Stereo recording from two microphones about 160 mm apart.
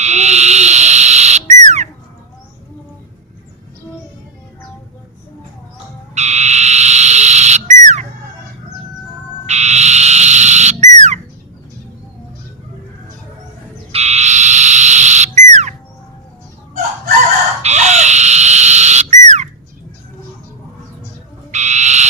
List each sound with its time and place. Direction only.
0.0 s frog: 45° right (ahead or behind)
6.1 s frog: 45° right (ahead or behind)
9.5 s frog: 45° right (ahead or behind)
13.9 s frog: 45° right (ahead or behind)
17.6 s frog: 45° right (ahead or behind)
21.5 s frog: 45° right (ahead or behind)